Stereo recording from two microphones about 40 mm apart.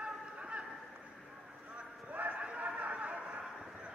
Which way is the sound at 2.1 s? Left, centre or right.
Right.